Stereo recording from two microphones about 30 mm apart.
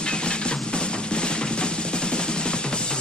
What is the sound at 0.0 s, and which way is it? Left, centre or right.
Music, left.